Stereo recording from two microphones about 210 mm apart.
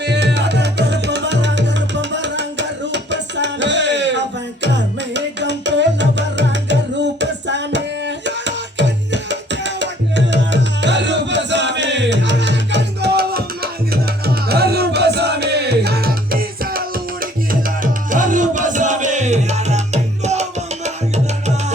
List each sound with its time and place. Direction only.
0.0 s music: 55° right (ahead or behind)
18.1 s music: 40° right (ahead or behind)